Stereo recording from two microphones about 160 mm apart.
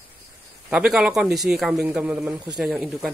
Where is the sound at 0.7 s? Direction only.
5° right (ahead or behind).